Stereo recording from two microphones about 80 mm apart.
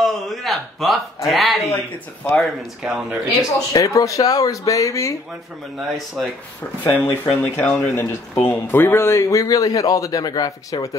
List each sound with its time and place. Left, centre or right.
0.0 s a man's voice: centre
2.8 s speech: centre
3.5 s speech: left
5.8 s speech: centre
6.8 s speech: left